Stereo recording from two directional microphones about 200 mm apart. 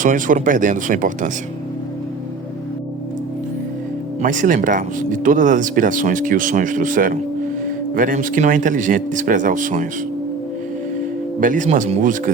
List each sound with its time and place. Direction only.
0.0 s speech: 40° right (ahead or behind)
4.2 s speech: 40° right (ahead or behind)
11.3 s speech: 40° right (ahead or behind)